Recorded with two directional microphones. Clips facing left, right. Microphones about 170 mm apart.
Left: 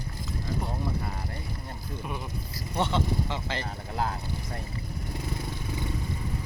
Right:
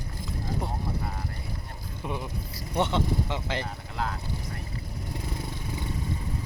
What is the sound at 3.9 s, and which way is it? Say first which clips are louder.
Speech: left 3 dB; 30° left (ahead or behind).